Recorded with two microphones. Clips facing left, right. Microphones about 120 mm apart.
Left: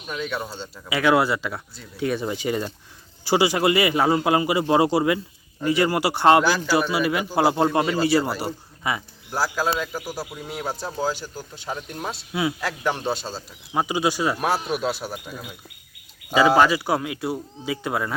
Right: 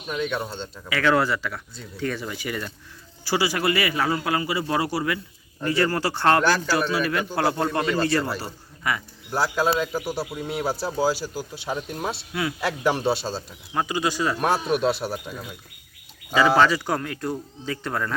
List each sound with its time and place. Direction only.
0.1 s speech: centre (ahead or behind)
0.9 s a man's voice: 15° left (ahead or behind)
9.3 s speech: centre (ahead or behind)
12.3 s speech: 10° left (ahead or behind)
12.6 s speech: 5° right (ahead or behind)
13.7 s speech: 15° left (ahead or behind); by 15.4 s centre (ahead or behind)
16.6 s speech: 10° left (ahead or behind)